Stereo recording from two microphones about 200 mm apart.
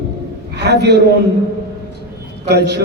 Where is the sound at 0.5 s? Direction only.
55° right (ahead or behind).